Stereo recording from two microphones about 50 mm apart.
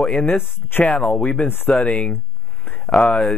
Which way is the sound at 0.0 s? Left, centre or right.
Left.